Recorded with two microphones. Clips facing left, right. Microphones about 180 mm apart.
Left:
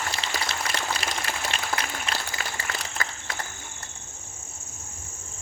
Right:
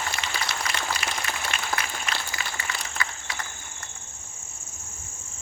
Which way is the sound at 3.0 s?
45° left (ahead or behind).